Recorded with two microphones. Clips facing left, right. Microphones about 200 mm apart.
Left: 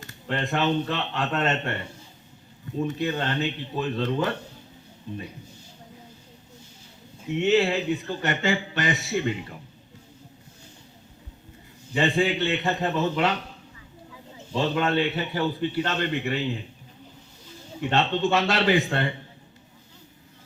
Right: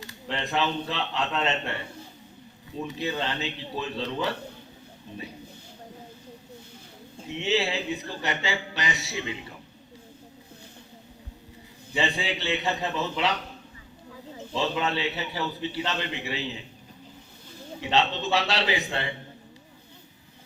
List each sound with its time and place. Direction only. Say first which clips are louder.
0.0 s speech: left 3 dB; 50° left (ahead or behind)
2.8 s speech: left 3 dB; 50° left (ahead or behind)
7.3 s speech: left 6 dB; 50° left (ahead or behind)
11.9 s speech: left 6 dB; 50° left (ahead or behind)
14.5 s speech: left 4 dB; 50° left (ahead or behind)
17.9 s speech: left 2 dB; 50° left (ahead or behind)